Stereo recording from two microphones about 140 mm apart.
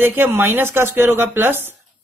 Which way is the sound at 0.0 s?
15° right (ahead or behind).